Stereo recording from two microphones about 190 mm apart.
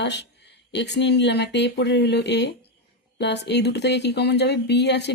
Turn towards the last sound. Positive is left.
turn(degrees=65)  # may be behind; listen again after turning